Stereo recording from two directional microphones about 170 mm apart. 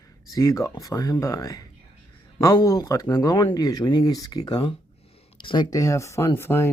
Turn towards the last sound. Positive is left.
turn(degrees=15)  # may be behind; listen again after turning